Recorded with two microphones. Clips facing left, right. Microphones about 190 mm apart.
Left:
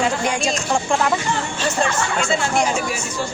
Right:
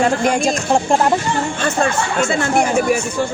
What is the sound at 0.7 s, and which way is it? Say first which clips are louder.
Speech: right 5 dB; 35° right (ahead or behind).